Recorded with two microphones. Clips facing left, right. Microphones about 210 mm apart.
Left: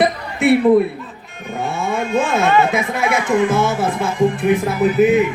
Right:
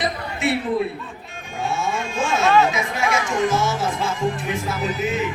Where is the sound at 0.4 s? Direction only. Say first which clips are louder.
Left 9 dB; 55° left (ahead or behind).